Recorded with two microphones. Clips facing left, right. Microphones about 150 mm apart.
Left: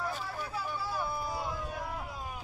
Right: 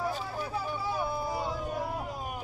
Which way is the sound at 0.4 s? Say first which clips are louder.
Right 4 dB; 50° right (ahead or behind).